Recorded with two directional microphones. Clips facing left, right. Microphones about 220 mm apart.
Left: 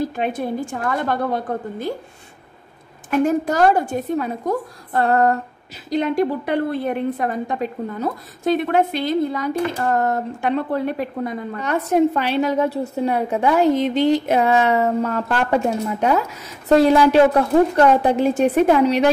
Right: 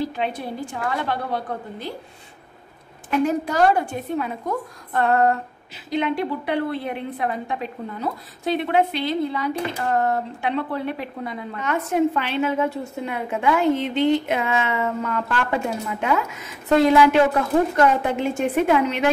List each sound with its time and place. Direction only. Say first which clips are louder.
0.0 s a woman's voice: left 3 dB; 50° left (ahead or behind)
3.1 s a woman's voice: left 3 dB; 45° left (ahead or behind)